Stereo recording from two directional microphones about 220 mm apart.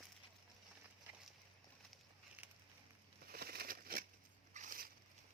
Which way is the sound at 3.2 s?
45° right (ahead or behind).